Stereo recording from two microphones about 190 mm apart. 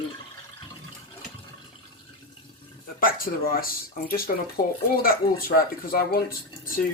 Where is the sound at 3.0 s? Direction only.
50° left (ahead or behind).